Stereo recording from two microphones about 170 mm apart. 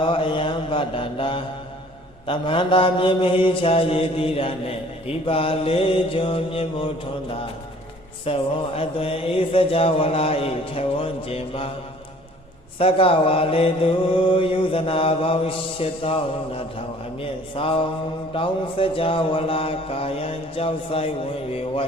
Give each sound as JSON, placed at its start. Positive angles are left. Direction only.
{"t": 0.0, "sound": "mantra", "side_deg": 30}
{"t": 12.8, "sound": "mantra", "side_deg": 35}